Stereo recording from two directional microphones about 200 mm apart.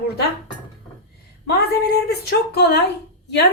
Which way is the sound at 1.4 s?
50° left (ahead or behind).